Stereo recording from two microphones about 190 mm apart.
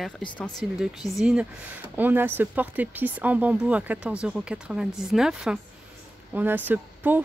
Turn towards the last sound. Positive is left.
turn(degrees=-10)  # may be behind; listen again after turning